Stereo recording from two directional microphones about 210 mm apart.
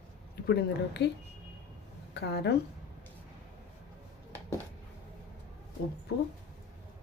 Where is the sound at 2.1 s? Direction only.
55° left (ahead or behind).